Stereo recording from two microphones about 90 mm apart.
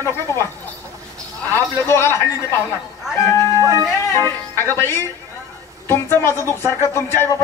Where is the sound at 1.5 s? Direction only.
30° left (ahead or behind).